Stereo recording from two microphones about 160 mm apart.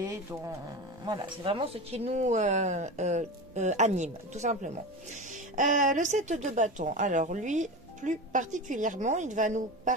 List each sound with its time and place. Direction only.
0.0 s speech: 20° right (ahead or behind); by 9.9 s 50° right (ahead or behind)